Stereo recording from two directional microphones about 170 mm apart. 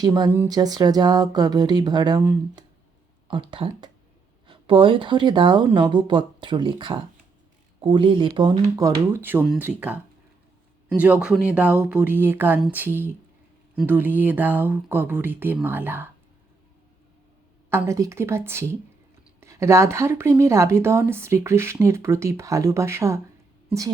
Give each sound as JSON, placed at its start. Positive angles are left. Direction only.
{"t": 0.0, "sound": "speech", "side_deg": -25}
{"t": 3.2, "sound": "speech", "side_deg": -30}
{"t": 8.7, "sound": "speech", "side_deg": -15}
{"t": 17.7, "sound": "speech", "side_deg": -15}